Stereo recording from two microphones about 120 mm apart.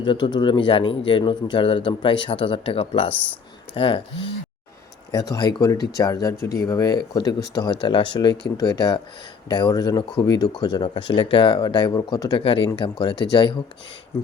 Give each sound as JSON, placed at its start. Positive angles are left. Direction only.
{"t": 0.0, "sound": "speech", "side_deg": 40}
{"t": 5.1, "sound": "speech", "side_deg": 35}
{"t": 12.4, "sound": "speech", "side_deg": 50}